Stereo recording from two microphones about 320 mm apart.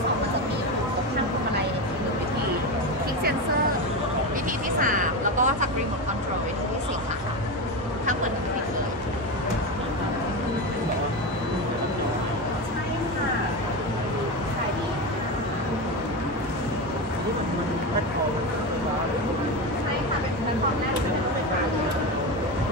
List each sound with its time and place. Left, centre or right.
4.7 s vehicle: right